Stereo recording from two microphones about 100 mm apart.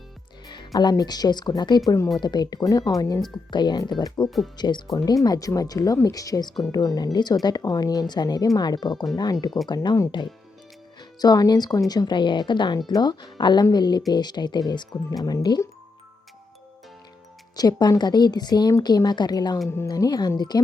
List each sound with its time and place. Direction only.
0.4 s speech: 45° left (ahead or behind)
11.2 s speech: 40° left (ahead or behind)
17.6 s speech: 45° left (ahead or behind)
19.6 s speech: 30° left (ahead or behind)
19.9 s speech: 45° left (ahead or behind)